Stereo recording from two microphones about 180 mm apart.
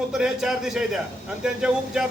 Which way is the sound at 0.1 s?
Centre (ahead or behind).